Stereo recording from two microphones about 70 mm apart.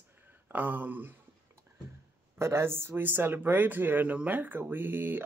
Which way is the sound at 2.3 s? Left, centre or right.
Right.